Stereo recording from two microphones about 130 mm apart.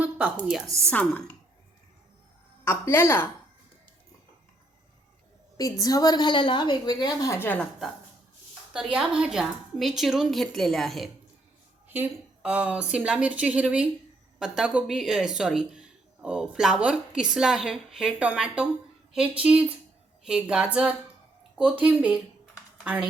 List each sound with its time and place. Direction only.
0.0 s a sound: 10° right (ahead or behind)
0.9 s speech: 10° left (ahead or behind)
2.6 s a woman's voice: 20° left (ahead or behind)
5.5 s a woman's voice: 25° left (ahead or behind)
7.3 s speech: 15° left (ahead or behind)
8.7 s speech: 5° right (ahead or behind)
11.9 s speech: 10° right (ahead or behind)